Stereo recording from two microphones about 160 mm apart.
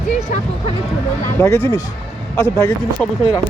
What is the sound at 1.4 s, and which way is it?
Speech, 15° left (ahead or behind).